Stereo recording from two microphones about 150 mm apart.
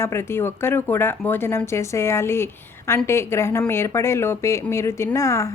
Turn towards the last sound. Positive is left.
turn(degrees=20)  # may be behind; listen again after turning